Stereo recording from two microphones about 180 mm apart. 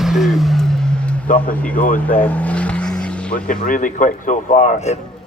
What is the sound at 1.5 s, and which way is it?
Speech, 10° left (ahead or behind).